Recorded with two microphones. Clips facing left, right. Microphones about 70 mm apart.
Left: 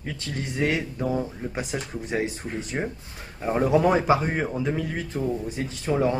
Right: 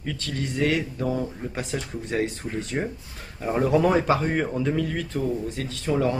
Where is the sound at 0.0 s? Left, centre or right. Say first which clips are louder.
Right 2 dB; left.